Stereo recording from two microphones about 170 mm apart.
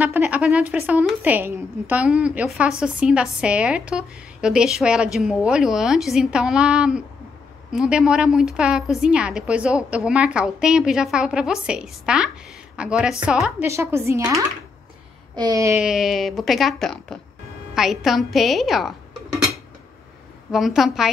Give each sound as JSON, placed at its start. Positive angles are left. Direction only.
{"t": 0.0, "sound": "a woman's voice", "side_deg": -10}
{"t": 15.3, "sound": "a sound", "side_deg": -20}
{"t": 15.8, "sound": "a woman's voice", "side_deg": -5}
{"t": 20.5, "sound": "a woman's voice", "side_deg": 0}